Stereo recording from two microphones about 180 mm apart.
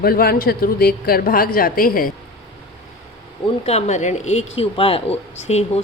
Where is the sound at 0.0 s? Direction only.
55° left (ahead or behind).